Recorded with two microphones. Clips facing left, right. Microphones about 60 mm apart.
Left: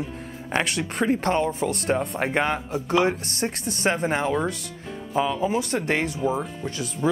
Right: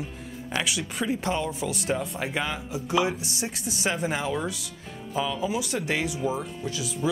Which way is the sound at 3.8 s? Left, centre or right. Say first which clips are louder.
Left 5 dB; left.